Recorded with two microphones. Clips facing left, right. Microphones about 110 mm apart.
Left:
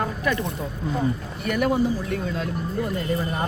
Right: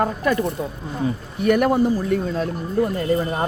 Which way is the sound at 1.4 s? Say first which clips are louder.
Right 6 dB; 50° right (ahead or behind).